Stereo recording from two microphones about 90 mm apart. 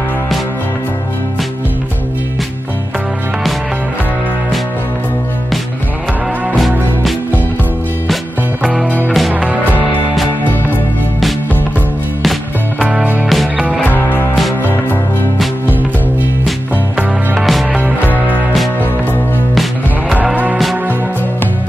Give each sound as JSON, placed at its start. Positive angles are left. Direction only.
{"t": 6.5, "sound": "music", "side_deg": 0}
{"t": 8.8, "sound": "music", "side_deg": 15}
{"t": 9.3, "sound": "music", "side_deg": -15}
{"t": 12.7, "sound": "music", "side_deg": -15}
{"t": 13.3, "sound": "music", "side_deg": 0}
{"t": 13.7, "sound": "music", "side_deg": 20}
{"t": 17.4, "sound": "music", "side_deg": 0}
{"t": 18.1, "sound": "music", "side_deg": -20}